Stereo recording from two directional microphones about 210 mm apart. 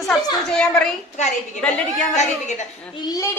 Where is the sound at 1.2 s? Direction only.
35° left (ahead or behind).